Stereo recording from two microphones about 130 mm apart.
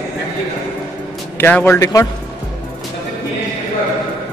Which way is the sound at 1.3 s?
15° left (ahead or behind).